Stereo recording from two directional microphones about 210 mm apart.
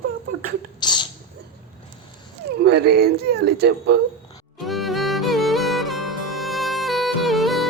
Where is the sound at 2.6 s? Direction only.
50° right (ahead or behind).